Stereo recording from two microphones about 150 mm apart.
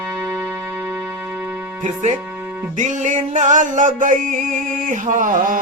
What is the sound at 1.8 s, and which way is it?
Music, 55° right (ahead or behind).